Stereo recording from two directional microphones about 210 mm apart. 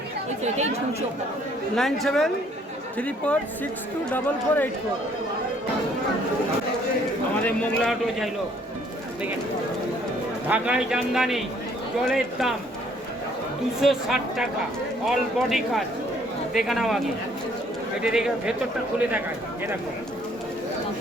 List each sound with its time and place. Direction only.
0.4 s speech: 30° right (ahead or behind)
1.7 s a man's voice: centre (ahead or behind)
7.4 s a man's voice: centre (ahead or behind)
10.5 s a man's voice: 5° right (ahead or behind)
13.8 s a man's voice: centre (ahead or behind)
18.0 s a man's voice: 5° right (ahead or behind)